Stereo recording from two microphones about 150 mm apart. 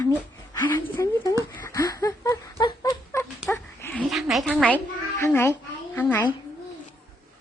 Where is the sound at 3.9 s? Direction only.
Centre (ahead or behind).